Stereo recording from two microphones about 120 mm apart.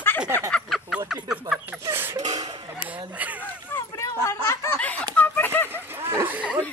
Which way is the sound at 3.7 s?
25° left (ahead or behind).